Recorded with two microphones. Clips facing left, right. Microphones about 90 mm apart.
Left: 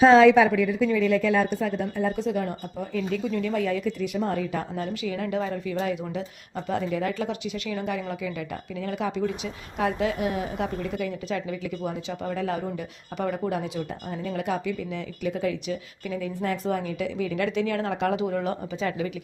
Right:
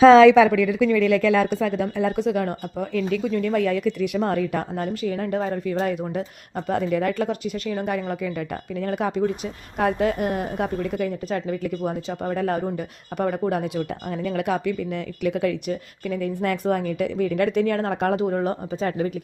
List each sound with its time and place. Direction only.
0.2 s a woman's voice: 90° right; by 19.1 s 40° right (ahead or behind)